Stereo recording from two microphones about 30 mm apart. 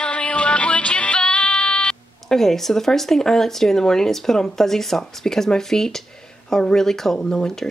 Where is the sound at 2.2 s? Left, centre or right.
Centre.